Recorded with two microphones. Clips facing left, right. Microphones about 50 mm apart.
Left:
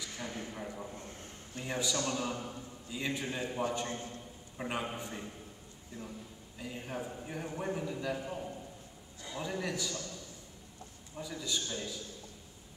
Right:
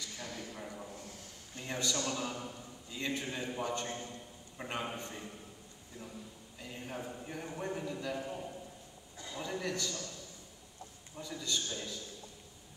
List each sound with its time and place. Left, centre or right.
0.1 s a man's voice: left
0.6 s a man's voice: centre
0.9 s a man's voice: left
1.6 s a man's voice: centre
6.0 s a man's voice: left
6.6 s a man's voice: centre
11.1 s a man's voice: centre